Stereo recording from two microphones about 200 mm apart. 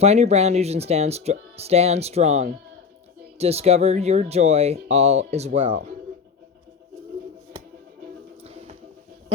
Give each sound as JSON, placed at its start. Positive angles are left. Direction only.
{"t": 0.0, "sound": "speech", "side_deg": -30}